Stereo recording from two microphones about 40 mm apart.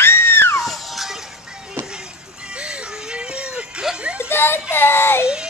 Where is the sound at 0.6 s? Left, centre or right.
Centre.